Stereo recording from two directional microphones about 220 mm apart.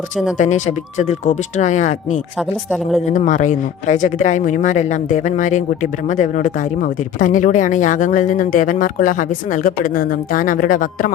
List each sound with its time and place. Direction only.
0.3 s speech: 35° left (ahead or behind)